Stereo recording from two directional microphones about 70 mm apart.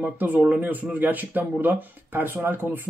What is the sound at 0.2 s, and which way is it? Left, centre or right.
Speech, right.